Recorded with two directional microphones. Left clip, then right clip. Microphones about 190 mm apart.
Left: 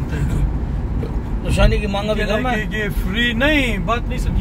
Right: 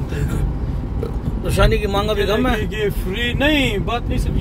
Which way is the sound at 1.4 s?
15° right (ahead or behind).